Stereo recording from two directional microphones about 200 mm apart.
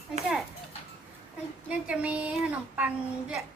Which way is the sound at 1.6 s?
5° right (ahead or behind).